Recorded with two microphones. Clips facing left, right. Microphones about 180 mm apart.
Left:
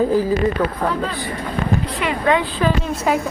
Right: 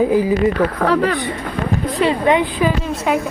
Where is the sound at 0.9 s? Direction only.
75° right (ahead or behind).